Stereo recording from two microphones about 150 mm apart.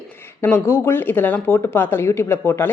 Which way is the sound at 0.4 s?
15° left (ahead or behind).